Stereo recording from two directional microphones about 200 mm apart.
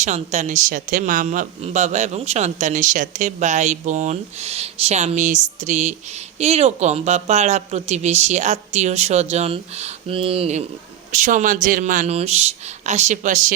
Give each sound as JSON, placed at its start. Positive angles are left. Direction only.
{"t": 0.0, "sound": "speech", "side_deg": -35}